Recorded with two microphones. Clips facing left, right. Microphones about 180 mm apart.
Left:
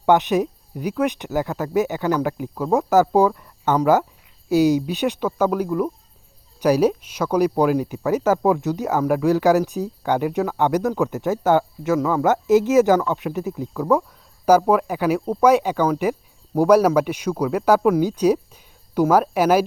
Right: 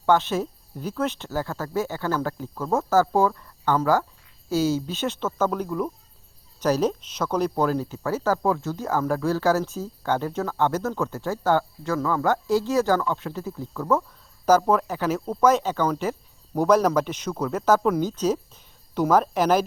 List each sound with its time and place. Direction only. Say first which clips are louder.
0.0 s speech: left 4 dB; 15° left (ahead or behind)